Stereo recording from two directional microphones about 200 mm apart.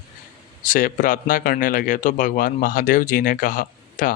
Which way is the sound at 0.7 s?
40° left (ahead or behind).